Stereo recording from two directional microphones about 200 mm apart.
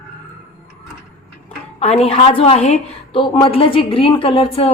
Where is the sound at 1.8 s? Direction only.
30° left (ahead or behind).